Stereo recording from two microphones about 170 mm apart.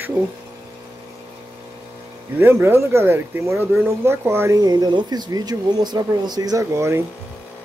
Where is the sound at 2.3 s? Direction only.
15° right (ahead or behind).